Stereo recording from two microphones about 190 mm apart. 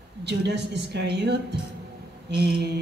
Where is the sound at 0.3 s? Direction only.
60° right (ahead or behind).